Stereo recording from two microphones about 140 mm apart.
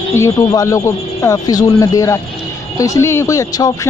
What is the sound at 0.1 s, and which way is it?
Speech, 20° left (ahead or behind).